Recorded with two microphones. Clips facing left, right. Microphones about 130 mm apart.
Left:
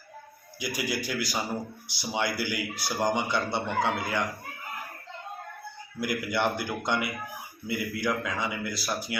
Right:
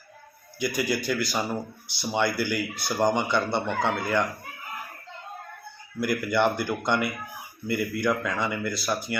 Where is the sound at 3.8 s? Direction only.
5° left (ahead or behind).